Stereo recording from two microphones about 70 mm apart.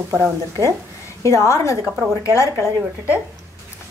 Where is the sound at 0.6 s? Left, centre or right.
Left.